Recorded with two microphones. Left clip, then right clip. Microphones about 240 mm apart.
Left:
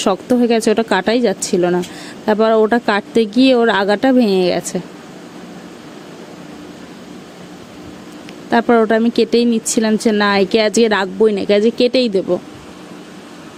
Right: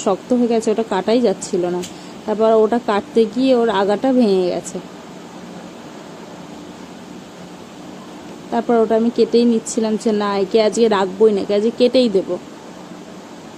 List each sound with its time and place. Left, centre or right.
0.0 s speech: left
8.4 s speech: left